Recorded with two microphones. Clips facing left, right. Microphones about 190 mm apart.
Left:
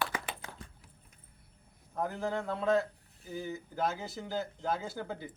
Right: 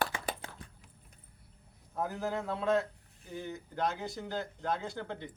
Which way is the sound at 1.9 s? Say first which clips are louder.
Left 1 dB; centre (ahead or behind).